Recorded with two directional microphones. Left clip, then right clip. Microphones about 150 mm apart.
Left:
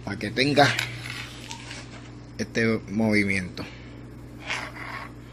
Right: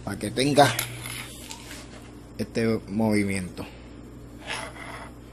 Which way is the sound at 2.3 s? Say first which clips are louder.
Left 1 dB; 5° right (ahead or behind).